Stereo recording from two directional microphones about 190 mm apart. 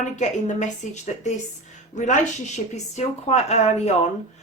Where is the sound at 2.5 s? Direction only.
35° left (ahead or behind).